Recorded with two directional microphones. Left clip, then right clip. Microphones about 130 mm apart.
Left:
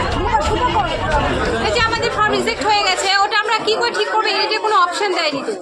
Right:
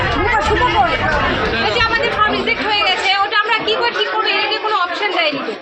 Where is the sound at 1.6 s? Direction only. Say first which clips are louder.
Right 2 dB; 20° left (ahead or behind).